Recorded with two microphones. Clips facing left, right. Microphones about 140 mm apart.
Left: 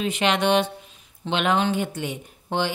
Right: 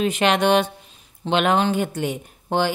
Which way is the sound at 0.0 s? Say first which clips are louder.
Right 3 dB; 50° right (ahead or behind).